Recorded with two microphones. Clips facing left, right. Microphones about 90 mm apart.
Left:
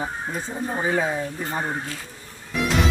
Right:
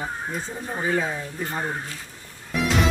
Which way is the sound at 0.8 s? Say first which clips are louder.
Left 1 dB; 20° left (ahead or behind).